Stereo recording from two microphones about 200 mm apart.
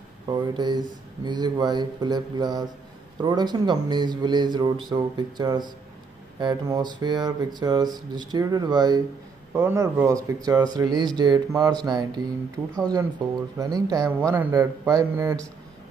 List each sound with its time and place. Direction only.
0.3 s a man's voice: 20° right (ahead or behind)